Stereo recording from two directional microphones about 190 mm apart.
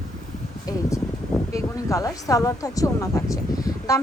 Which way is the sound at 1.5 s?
15° left (ahead or behind).